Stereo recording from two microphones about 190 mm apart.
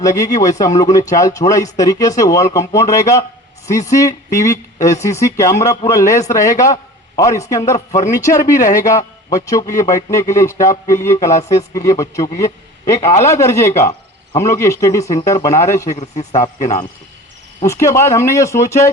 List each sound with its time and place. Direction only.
0.0 s speech: 20° left (ahead or behind)
11.3 s speech: 40° left (ahead or behind)
11.9 s a man's voice: 15° left (ahead or behind)
16.0 s speech: 35° left (ahead or behind)
17.6 s speech: 15° left (ahead or behind)